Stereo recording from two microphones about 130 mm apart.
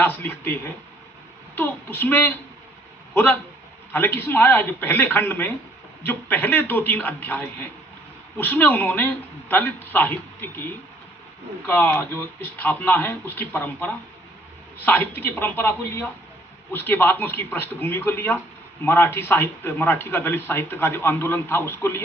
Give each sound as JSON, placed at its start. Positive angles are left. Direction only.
{"t": 0.0, "sound": "speech", "side_deg": 15}
{"t": 11.6, "sound": "speech", "side_deg": 15}